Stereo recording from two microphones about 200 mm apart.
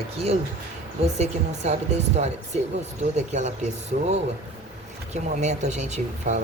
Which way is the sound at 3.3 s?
35° right (ahead or behind).